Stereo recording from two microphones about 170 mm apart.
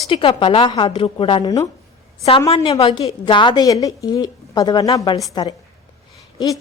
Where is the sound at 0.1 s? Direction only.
30° left (ahead or behind).